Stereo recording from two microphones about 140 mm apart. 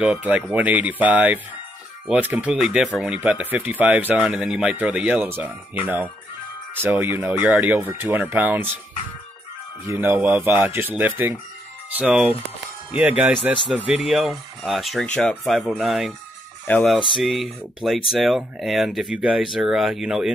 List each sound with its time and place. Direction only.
0.0 s speech: 10° right (ahead or behind)
6.7 s speech: 15° right (ahead or behind)
9.8 s speech: 15° right (ahead or behind)